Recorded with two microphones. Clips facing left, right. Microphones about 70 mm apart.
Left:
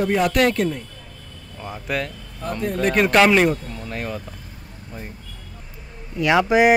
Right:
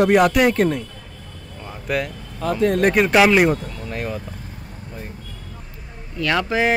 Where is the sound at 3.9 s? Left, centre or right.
Centre.